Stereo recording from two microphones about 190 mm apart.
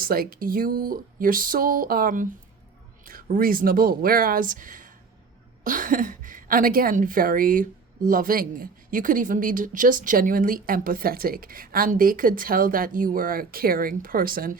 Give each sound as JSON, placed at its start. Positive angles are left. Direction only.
{"t": 0.0, "sound": "a woman's voice", "side_deg": -50}